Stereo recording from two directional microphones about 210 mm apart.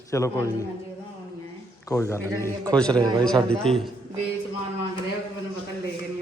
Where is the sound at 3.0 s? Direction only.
20° right (ahead or behind).